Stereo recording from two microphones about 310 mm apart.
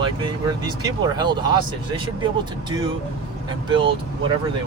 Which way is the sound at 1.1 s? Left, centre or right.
Centre.